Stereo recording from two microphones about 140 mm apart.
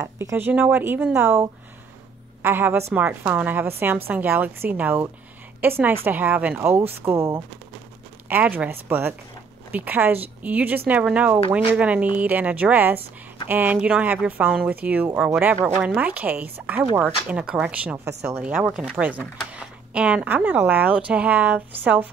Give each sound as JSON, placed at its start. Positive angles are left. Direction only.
{"t": 0.0, "sound": "speech", "side_deg": -20}